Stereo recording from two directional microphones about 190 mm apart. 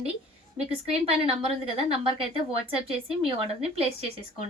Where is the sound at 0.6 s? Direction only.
30° right (ahead or behind).